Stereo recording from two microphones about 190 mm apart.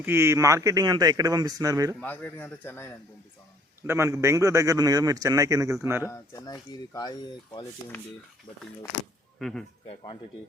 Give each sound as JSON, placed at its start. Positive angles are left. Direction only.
{"t": 0.0, "sound": "speech", "side_deg": -15}
{"t": 2.0, "sound": "a man's voice", "side_deg": 10}
{"t": 3.8, "sound": "speech", "side_deg": -15}
{"t": 6.0, "sound": "speech", "side_deg": 15}
{"t": 9.4, "sound": "speech", "side_deg": 5}
{"t": 9.9, "sound": "speech", "side_deg": 25}